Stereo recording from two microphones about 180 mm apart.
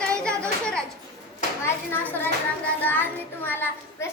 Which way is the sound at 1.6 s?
10° left (ahead or behind).